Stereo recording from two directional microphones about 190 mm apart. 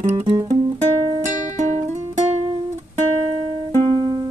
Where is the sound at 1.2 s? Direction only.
40° right (ahead or behind).